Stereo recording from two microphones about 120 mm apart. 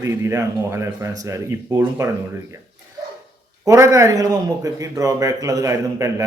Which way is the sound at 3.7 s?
25° right (ahead or behind).